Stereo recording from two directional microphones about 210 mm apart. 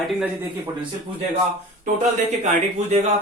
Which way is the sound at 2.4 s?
35° right (ahead or behind).